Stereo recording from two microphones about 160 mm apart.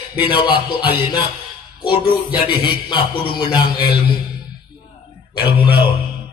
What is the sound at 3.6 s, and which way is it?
Music, 75° left (ahead or behind).